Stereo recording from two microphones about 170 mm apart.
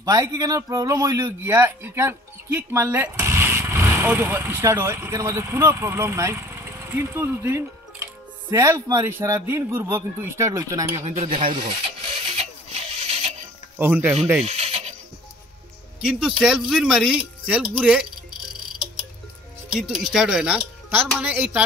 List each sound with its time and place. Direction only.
0.0 s a man's voice: 20° right (ahead or behind)
11.1 s speech: 35° right (ahead or behind)
13.0 s a sound: 35° right (ahead or behind)
13.7 s a man's voice: 10° right (ahead or behind)
14.4 s bleat: 40° right (ahead or behind)
16.0 s speech: 5° right (ahead or behind)
19.7 s speech: centre (ahead or behind)